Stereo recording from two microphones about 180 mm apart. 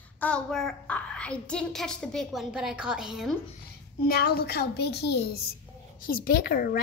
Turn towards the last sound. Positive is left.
turn(degrees=60)  # may be behind; listen again after turning